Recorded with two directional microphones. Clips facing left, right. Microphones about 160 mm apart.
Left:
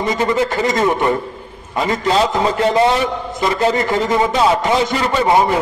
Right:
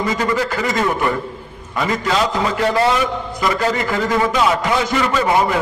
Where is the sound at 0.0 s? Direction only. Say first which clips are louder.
Left 2 dB; 25° left (ahead or behind).